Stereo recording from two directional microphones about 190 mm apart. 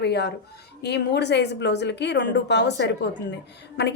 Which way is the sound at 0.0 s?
60° left (ahead or behind).